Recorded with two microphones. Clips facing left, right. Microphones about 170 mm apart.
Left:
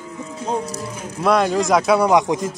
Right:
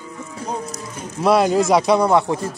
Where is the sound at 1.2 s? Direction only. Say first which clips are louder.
Right 2 dB; 5° right (ahead or behind); by 2.5 s 15° left (ahead or behind).